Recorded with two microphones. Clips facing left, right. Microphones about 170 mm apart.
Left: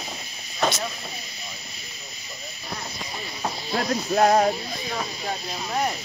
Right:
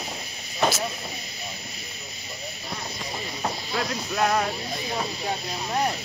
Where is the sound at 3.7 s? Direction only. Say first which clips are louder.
Left 9 dB; 40° left (ahead or behind).